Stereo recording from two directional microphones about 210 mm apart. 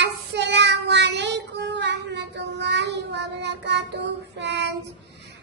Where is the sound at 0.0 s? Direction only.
55° right (ahead or behind).